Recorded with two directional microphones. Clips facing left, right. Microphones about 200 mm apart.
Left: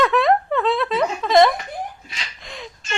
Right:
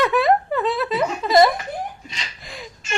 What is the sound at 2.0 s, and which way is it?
Laughter, centre (ahead or behind).